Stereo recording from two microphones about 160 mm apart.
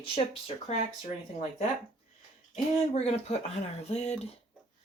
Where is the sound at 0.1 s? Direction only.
35° left (ahead or behind).